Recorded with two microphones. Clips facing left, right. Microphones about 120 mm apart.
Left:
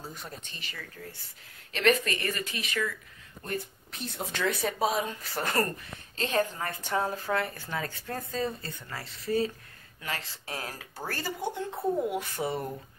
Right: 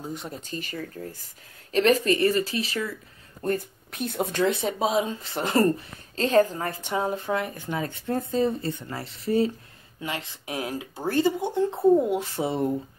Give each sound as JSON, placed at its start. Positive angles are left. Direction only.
{"t": 0.0, "sound": "speech", "side_deg": -25}
{"t": 3.4, "sound": "speech", "side_deg": -50}
{"t": 4.5, "sound": "speech", "side_deg": -25}
{"t": 6.1, "sound": "speech", "side_deg": -40}
{"t": 6.6, "sound": "speech", "side_deg": -25}
{"t": 6.9, "sound": "speech", "side_deg": -15}